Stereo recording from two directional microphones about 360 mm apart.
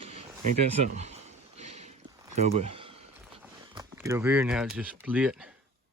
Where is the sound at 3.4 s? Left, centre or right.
Centre.